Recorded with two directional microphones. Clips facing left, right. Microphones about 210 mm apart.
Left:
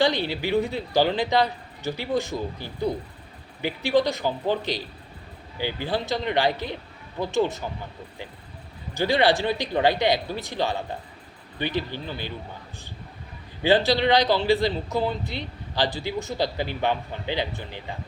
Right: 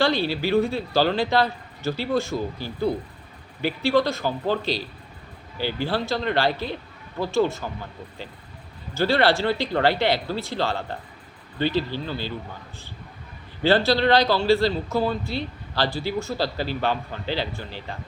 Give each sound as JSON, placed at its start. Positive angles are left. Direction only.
{"t": 0.0, "sound": "a man's voice", "side_deg": 20}
{"t": 9.0, "sound": "a man's voice", "side_deg": 15}
{"t": 13.6, "sound": "a man's voice", "side_deg": 15}